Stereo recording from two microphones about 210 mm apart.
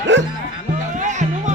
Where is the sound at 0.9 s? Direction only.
35° right (ahead or behind).